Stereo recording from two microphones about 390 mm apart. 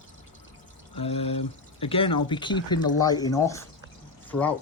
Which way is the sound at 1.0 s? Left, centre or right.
Centre.